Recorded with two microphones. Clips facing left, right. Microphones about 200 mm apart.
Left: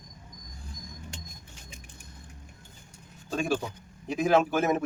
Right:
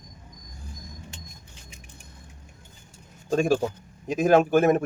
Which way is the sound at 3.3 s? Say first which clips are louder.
Right 7 dB; 45° right (ahead or behind).